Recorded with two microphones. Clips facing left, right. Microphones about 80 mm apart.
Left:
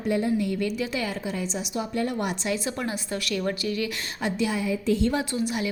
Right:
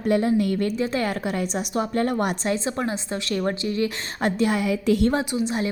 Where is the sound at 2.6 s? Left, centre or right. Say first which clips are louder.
Right 4 dB; right.